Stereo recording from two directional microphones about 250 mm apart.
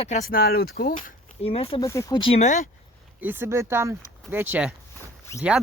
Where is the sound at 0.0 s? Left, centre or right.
Left.